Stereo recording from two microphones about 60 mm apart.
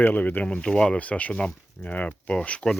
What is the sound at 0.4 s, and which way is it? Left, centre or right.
Speech, centre.